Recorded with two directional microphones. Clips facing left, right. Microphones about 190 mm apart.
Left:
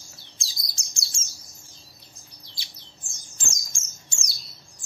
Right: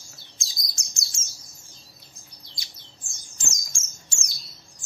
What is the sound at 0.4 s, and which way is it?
Chirp, 30° left (ahead or behind).